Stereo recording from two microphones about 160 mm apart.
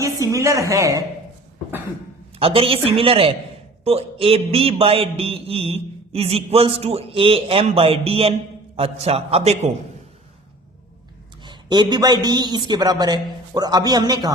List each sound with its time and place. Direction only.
0.0 s a man's voice: 20° right (ahead or behind)
2.4 s mantra: 35° right (ahead or behind)
11.4 s a man's voice: 25° right (ahead or behind)